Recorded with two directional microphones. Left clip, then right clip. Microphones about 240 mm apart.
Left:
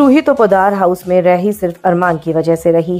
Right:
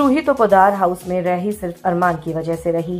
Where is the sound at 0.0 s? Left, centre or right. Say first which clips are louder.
Left 6 dB; left.